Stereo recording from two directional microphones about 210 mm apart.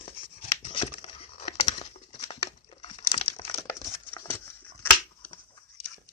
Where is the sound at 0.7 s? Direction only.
25° left (ahead or behind).